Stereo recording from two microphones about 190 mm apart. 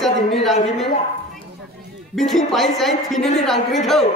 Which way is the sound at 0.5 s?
35° left (ahead or behind).